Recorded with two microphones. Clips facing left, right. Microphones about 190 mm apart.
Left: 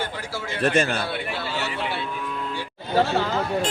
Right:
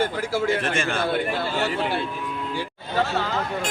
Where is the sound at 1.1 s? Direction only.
50° right (ahead or behind).